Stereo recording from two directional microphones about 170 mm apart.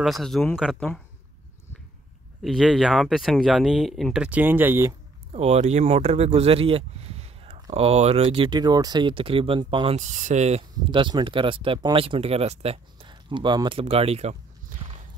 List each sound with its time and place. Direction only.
0.0 s speech: centre (ahead or behind)
2.4 s speech: centre (ahead or behind)
5.3 s speech: 40° right (ahead or behind)
9.9 s speech: 45° right (ahead or behind)
10.9 s speech: 30° right (ahead or behind)